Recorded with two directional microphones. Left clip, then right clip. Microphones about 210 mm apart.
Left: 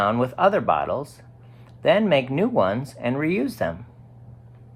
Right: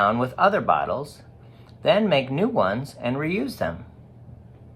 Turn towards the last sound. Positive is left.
turn(degrees=30)  # may be behind; listen again after turning